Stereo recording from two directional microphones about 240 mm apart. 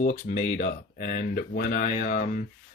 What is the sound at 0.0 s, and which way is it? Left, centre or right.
Speech, left.